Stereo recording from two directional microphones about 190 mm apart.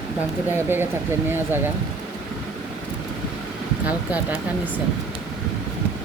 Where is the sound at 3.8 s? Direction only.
10° right (ahead or behind).